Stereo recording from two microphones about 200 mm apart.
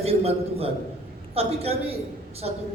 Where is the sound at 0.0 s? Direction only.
30° right (ahead or behind).